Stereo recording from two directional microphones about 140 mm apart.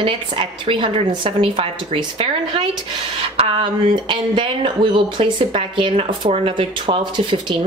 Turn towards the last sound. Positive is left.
turn(degrees=-35)  # may be behind; listen again after turning